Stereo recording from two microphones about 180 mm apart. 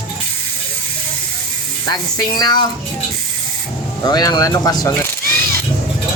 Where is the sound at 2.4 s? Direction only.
20° left (ahead or behind).